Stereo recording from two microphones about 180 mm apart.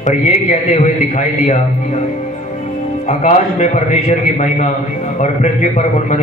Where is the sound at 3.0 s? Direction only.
40° left (ahead or behind).